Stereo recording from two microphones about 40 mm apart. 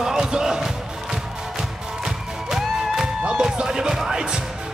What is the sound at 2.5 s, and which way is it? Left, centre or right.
Music, centre.